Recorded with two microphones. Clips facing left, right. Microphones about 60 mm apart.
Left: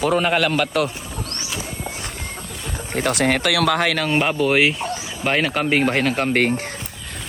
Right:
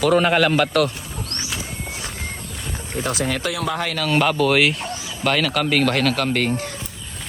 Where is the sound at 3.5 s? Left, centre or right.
Left.